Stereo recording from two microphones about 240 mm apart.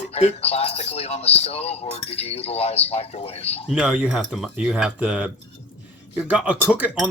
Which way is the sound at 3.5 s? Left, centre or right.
Centre.